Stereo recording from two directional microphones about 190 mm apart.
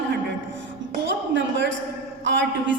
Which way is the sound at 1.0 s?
75° right (ahead or behind).